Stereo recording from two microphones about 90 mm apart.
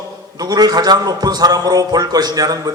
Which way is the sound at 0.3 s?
45° right (ahead or behind).